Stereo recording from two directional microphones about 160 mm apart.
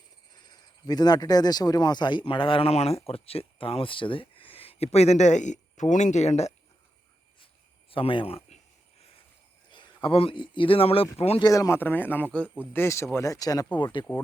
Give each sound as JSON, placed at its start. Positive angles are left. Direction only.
{"t": 0.3, "sound": "speech", "side_deg": 25}
{"t": 7.9, "sound": "speech", "side_deg": 35}
{"t": 9.7, "sound": "speech", "side_deg": 35}
{"t": 11.4, "sound": "speech", "side_deg": 20}